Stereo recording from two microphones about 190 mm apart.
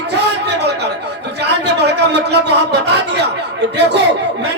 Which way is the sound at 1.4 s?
60° right (ahead or behind).